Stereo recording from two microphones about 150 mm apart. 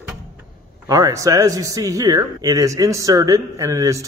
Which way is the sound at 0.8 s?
25° right (ahead or behind).